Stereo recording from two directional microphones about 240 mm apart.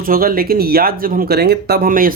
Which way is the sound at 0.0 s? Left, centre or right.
Right.